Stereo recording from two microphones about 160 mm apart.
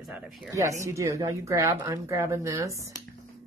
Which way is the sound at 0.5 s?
20° right (ahead or behind).